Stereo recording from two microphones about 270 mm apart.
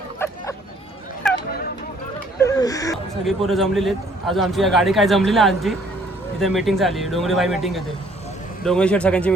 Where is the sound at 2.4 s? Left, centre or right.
Centre.